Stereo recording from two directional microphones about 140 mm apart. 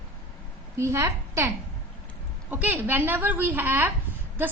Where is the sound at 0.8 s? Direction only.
20° right (ahead or behind).